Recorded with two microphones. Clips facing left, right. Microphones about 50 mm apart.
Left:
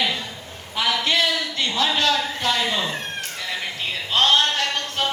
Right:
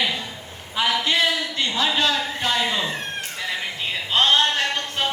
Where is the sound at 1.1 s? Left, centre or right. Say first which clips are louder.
Even; right.